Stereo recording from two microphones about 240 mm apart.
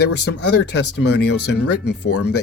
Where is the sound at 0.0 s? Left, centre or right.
Left.